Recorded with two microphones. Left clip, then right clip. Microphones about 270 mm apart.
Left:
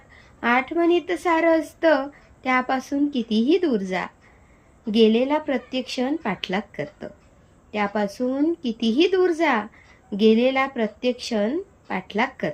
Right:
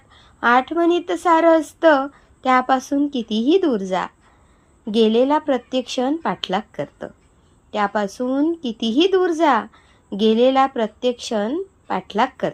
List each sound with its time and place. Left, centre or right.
0.3 s speech: centre
7.7 s speech: centre